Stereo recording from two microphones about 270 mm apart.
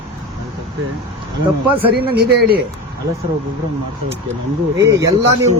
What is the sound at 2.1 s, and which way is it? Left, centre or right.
Speech, right.